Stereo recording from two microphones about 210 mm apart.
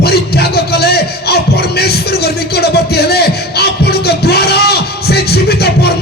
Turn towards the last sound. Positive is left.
turn(degrees=50)  # may be behind; listen again after turning